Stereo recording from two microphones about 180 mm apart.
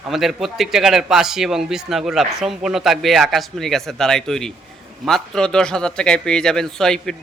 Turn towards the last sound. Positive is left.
turn(degrees=5)  # may be behind; listen again after turning